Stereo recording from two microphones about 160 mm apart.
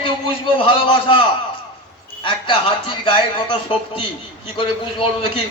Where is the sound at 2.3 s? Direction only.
30° left (ahead or behind).